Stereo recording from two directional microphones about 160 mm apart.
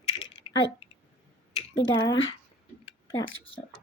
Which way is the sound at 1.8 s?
25° left (ahead or behind).